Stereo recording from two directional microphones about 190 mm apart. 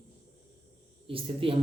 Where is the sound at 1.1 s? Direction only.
30° right (ahead or behind).